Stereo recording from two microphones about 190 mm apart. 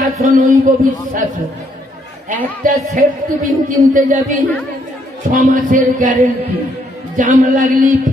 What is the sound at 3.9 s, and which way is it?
Speech, 40° right (ahead or behind).